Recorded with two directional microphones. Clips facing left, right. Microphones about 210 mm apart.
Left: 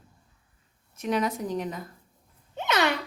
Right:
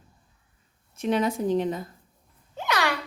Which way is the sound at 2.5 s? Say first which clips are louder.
Left 1 dB; 20° left (ahead or behind).